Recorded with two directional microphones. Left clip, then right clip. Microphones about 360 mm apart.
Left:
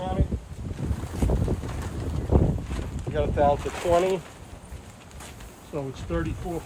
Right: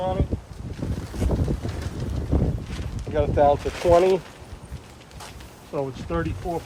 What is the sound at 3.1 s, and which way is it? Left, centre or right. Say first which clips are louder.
Speech: right 4 dB; right.